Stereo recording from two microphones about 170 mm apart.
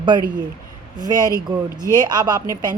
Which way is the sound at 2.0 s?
25° right (ahead or behind).